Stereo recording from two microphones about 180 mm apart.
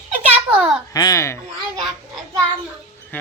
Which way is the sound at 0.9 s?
20° left (ahead or behind).